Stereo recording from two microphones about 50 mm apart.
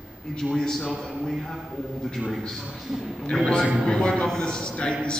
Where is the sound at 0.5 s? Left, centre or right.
Centre.